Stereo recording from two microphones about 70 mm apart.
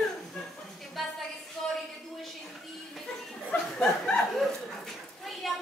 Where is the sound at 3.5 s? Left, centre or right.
Centre.